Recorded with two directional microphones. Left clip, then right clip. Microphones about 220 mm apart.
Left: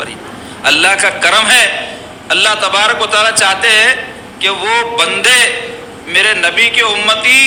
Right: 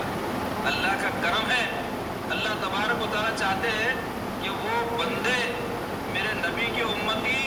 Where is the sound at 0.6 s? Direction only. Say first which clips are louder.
Left 18 dB; 45° left (ahead or behind).